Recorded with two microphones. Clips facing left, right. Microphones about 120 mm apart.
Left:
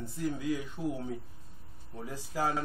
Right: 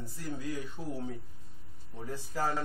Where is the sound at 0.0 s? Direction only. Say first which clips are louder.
Left 5 dB; 15° left (ahead or behind).